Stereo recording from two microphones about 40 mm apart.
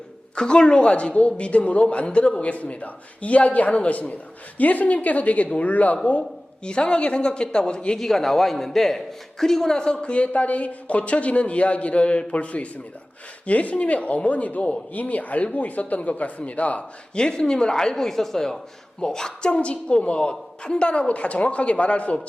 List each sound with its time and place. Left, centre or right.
0.3 s speech: left
6.7 s a woman's voice: left
7.9 s a man's voice: centre
10.0 s speech: left
17.2 s a woman's voice: left